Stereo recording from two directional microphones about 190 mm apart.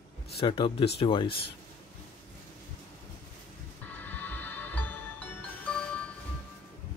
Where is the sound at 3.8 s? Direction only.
10° left (ahead or behind).